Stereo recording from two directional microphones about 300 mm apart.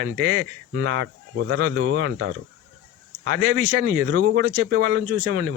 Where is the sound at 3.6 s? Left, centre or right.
Right.